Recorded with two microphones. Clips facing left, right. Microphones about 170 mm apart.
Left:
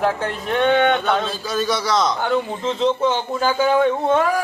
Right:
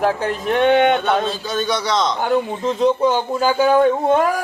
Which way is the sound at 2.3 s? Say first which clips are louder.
Right 2 dB; 10° right (ahead or behind).